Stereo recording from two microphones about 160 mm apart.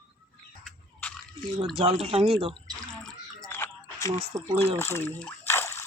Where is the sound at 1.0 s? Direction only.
10° left (ahead or behind).